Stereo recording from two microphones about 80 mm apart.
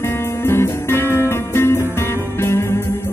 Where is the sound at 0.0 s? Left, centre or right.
Left.